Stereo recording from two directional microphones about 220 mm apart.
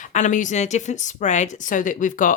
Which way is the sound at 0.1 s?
35° left (ahead or behind).